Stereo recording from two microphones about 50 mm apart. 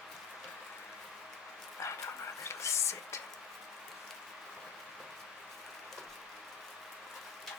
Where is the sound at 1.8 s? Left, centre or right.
Left.